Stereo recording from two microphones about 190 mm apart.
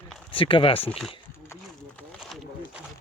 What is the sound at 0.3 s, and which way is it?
Speech, 25° left (ahead or behind).